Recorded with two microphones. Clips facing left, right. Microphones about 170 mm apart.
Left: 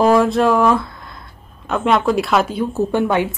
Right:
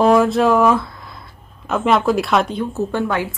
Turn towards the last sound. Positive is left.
turn(degrees=20)  # may be behind; listen again after turning